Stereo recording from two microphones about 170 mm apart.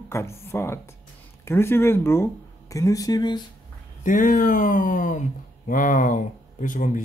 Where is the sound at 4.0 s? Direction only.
55° left (ahead or behind).